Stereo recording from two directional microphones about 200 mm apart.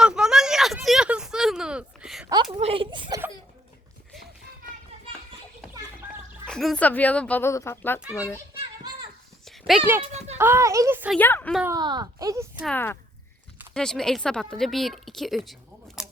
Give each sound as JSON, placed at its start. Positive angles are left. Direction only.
{"t": 0.0, "sound": "a sound", "side_deg": -5}
{"t": 2.6, "sound": "a sound", "side_deg": -30}
{"t": 6.4, "sound": "speech", "side_deg": 0}
{"t": 9.4, "sound": "dog", "side_deg": 0}
{"t": 10.0, "sound": "speech", "side_deg": -30}
{"t": 10.3, "sound": "speech", "side_deg": -10}
{"t": 11.2, "sound": "a woman's voice", "side_deg": 10}
{"t": 11.7, "sound": "speech", "side_deg": -20}
{"t": 12.7, "sound": "a woman's voice", "side_deg": 10}
{"t": 16.0, "sound": "typewriter", "side_deg": -5}